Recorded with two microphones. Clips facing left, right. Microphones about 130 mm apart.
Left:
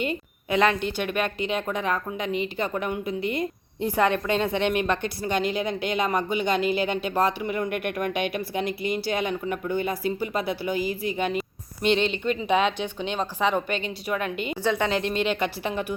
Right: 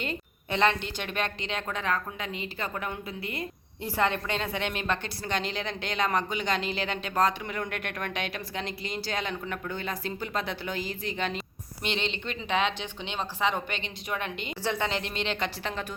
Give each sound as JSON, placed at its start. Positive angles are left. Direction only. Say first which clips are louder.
{"t": 0.0, "sound": "a sound", "louder": "left 6 dB", "side_deg": 10}
{"t": 0.6, "sound": "a woman's voice", "louder": "left 3 dB", "side_deg": -25}
{"t": 1.0, "sound": "a woman's voice", "louder": "left 4 dB", "side_deg": 10}
{"t": 11.8, "sound": "a woman's voice", "louder": "left 9 dB", "side_deg": -20}
{"t": 13.7, "sound": "a woman's voice", "louder": "left 6 dB", "side_deg": -25}
{"t": 14.5, "sound": "a woman's voice", "louder": "left 5 dB", "side_deg": 15}